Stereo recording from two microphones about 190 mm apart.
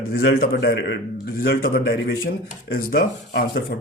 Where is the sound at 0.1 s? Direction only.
55° left (ahead or behind).